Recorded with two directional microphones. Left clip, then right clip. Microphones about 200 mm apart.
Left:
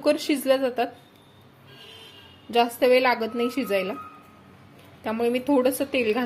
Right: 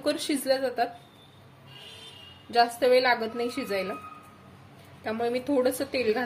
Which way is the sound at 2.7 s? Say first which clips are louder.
Left 2 dB; 30° left (ahead or behind).